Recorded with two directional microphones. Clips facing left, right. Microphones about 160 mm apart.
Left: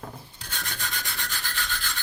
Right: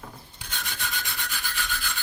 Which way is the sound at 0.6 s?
Centre (ahead or behind).